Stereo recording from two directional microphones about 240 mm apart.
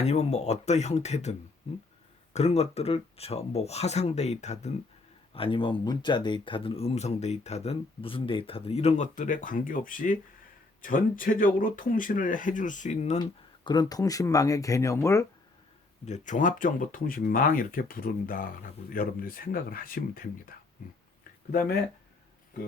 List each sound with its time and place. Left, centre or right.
0.0 s speech: left
13.7 s speech: centre
16.0 s speech: left
21.5 s speech: left